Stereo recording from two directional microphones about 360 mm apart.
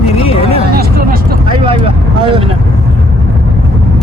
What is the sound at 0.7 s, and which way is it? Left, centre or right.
Vehicle, right.